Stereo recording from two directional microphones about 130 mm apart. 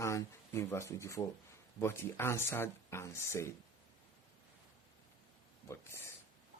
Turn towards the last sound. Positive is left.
turn(degrees=20)  # may be behind; listen again after turning